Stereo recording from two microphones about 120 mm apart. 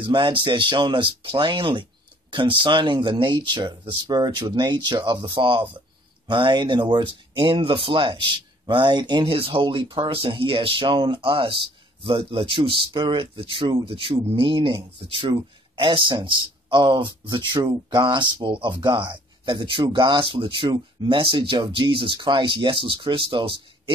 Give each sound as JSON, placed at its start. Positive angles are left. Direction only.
{"t": 0.0, "sound": "a man's voice", "side_deg": -45}